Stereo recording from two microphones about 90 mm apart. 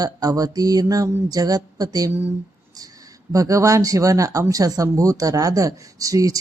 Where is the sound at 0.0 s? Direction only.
45° right (ahead or behind).